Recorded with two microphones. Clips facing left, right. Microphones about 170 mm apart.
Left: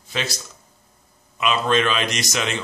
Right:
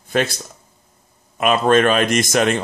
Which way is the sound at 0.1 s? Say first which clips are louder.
Right 8 dB; 55° right (ahead or behind).